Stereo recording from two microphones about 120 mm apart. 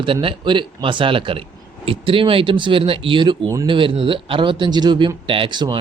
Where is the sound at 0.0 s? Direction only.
45° right (ahead or behind).